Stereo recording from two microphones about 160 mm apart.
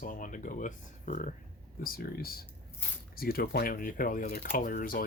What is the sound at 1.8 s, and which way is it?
Speech, 65° left (ahead or behind).